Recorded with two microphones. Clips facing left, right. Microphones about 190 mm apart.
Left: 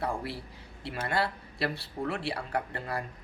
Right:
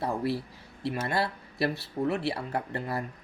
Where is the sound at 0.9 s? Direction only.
20° right (ahead or behind).